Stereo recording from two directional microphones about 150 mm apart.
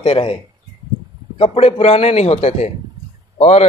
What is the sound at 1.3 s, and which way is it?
Speech, 40° left (ahead or behind).